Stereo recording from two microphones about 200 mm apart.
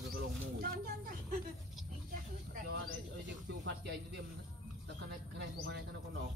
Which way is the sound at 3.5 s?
60° right (ahead or behind).